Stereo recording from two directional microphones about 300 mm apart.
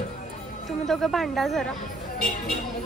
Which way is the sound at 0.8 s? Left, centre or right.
Centre.